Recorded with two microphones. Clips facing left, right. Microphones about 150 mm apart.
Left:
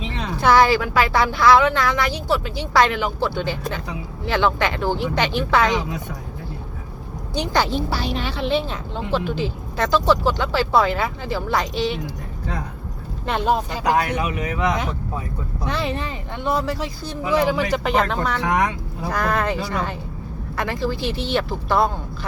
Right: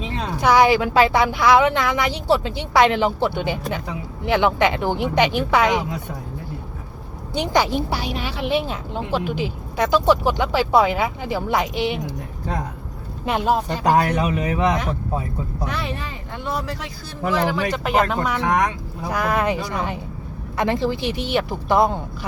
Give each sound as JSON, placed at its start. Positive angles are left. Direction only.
{"t": 0.4, "sound": "speech", "side_deg": -15}
{"t": 7.3, "sound": "speech", "side_deg": -15}
{"t": 13.2, "sound": "speech", "side_deg": -5}
{"t": 13.9, "sound": "speech", "side_deg": -40}
{"t": 14.3, "sound": "speech", "side_deg": -25}
{"t": 15.7, "sound": "speech", "side_deg": 25}
{"t": 17.9, "sound": "speech", "side_deg": -10}